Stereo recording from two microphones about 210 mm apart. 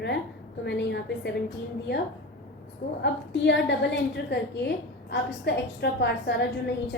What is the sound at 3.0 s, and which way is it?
A woman's voice, 55° left (ahead or behind).